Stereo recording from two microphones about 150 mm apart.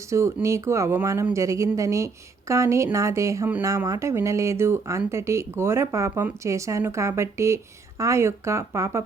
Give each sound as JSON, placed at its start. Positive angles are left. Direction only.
{"t": 0.1, "sound": "speech", "side_deg": -20}